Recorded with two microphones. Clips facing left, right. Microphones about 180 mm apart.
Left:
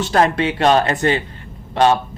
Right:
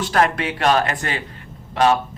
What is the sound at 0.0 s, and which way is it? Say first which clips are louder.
Speech: left 3 dB; 25° left (ahead or behind).